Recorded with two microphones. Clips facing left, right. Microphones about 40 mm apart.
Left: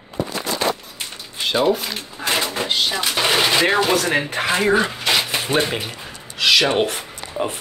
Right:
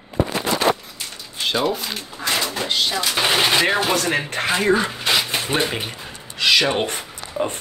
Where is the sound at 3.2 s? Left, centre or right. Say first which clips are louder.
Left 1 dB; centre.